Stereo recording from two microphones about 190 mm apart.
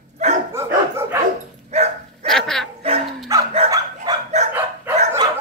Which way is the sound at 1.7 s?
35° right (ahead or behind).